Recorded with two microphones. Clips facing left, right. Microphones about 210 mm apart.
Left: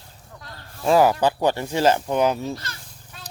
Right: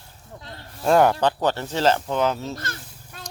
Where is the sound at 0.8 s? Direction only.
Centre (ahead or behind).